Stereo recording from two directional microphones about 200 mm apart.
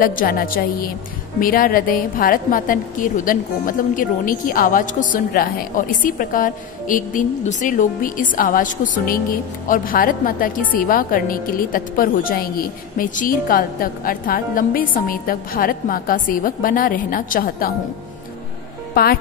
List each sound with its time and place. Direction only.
0.0 s a woman's voice: 45° left (ahead or behind)
19.0 s a woman's voice: 50° left (ahead or behind)